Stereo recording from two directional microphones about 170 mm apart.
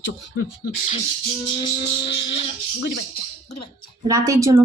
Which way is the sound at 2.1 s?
35° left (ahead or behind).